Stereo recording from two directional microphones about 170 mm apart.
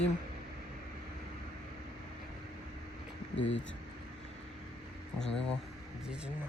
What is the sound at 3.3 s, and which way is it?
Speech, 90° left.